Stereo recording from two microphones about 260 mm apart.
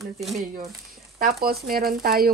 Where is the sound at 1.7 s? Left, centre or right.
Right.